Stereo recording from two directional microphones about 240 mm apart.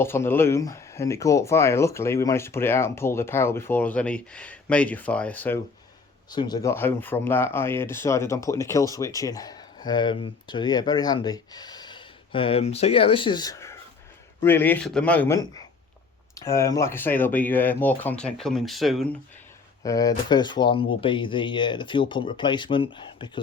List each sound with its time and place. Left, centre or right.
0.0 s speech: centre
6.3 s speech: centre
19.8 s speech: centre